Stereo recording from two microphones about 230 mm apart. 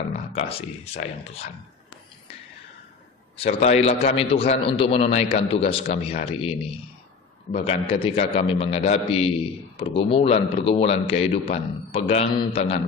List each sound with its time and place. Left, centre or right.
0.3 s a man's voice: left
3.3 s a man's voice: left